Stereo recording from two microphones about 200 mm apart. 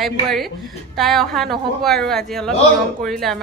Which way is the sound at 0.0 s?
Centre (ahead or behind).